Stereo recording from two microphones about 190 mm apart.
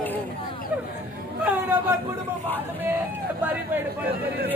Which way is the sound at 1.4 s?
10° right (ahead or behind).